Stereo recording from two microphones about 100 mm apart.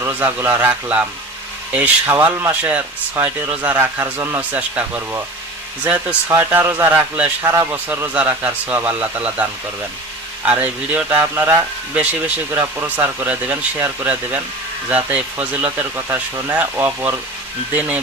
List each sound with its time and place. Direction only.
0.0 s speech: 20° right (ahead or behind)
6.2 s speech: 25° right (ahead or behind)